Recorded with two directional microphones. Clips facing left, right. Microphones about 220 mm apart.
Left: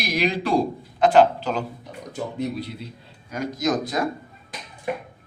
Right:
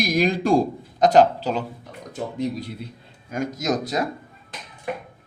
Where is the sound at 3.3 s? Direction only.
50° right (ahead or behind).